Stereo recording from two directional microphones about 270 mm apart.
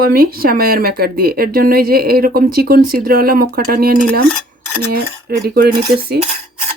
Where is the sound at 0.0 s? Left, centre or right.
Right.